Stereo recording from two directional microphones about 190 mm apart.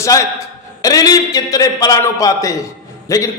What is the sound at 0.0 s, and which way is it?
A man's voice, 15° left (ahead or behind).